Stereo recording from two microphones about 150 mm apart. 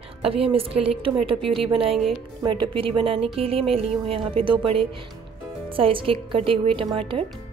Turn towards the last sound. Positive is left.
turn(degrees=-35)  # may be behind; listen again after turning